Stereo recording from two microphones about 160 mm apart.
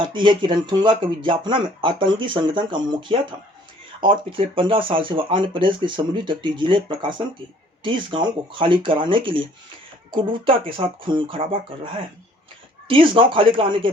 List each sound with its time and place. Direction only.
0.0 s speech: 30° right (ahead or behind)